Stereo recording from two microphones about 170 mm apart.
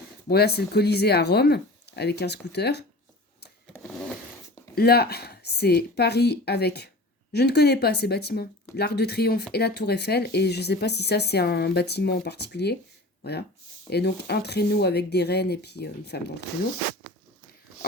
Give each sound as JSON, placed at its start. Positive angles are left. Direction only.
{"t": 0.3, "sound": "speech", "side_deg": 70}
{"t": 4.7, "sound": "speech", "side_deg": 65}
{"t": 13.9, "sound": "speech", "side_deg": 75}